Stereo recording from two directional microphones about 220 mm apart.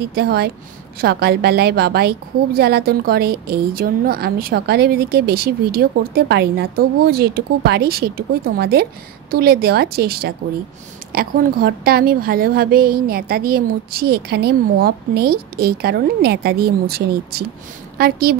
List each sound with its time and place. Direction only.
0.0 s a woman's voice: 45° right (ahead or behind)